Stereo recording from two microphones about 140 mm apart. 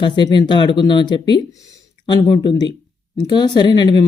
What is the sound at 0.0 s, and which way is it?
Speech, 35° left (ahead or behind).